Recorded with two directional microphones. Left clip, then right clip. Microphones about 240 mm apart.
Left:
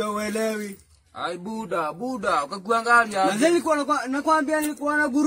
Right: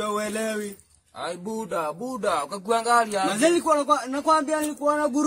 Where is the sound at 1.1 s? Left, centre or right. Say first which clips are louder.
Left 1 dB; right.